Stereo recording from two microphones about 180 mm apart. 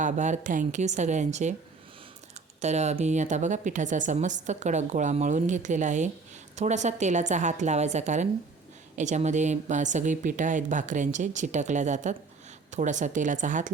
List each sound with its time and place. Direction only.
0.0 s speech: 45° right (ahead or behind)
2.6 s a woman's voice: 40° right (ahead or behind)